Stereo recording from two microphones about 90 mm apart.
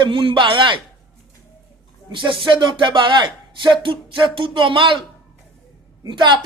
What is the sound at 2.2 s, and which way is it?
A man's voice, 65° right (ahead or behind).